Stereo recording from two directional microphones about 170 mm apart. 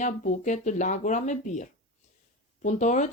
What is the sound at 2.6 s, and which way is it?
Speech, 45° left (ahead or behind).